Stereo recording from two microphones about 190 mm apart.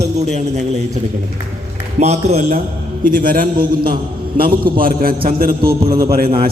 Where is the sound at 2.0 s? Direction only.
35° right (ahead or behind).